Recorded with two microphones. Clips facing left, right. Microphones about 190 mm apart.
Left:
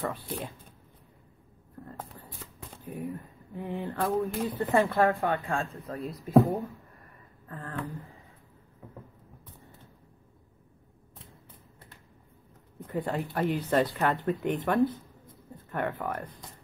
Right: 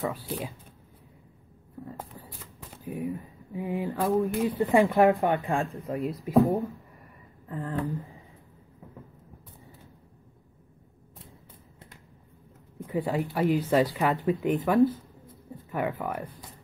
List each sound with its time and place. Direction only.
0.0 s speech: centre (ahead or behind)
1.9 s a sound: 5° right (ahead or behind)
2.8 s speech: centre (ahead or behind)
4.6 s speech: 15° right (ahead or behind)
6.3 s speech: centre (ahead or behind)
7.4 s speech: 15° right (ahead or behind)
7.8 s speech: centre (ahead or behind)
12.8 s speech: centre (ahead or behind)